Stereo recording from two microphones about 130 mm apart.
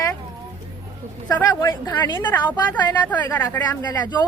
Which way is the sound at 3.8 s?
30° left (ahead or behind).